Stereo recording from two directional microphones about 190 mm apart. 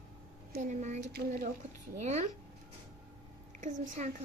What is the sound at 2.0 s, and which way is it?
Speech, 35° right (ahead or behind).